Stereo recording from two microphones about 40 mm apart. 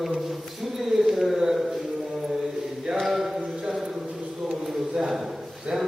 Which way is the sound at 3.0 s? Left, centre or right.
Centre.